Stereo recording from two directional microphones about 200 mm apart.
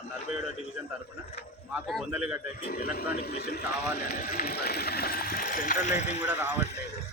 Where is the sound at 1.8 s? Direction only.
Centre (ahead or behind).